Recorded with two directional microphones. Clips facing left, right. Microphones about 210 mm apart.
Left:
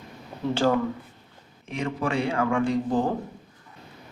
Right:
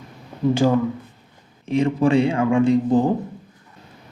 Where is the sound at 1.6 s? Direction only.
30° right (ahead or behind).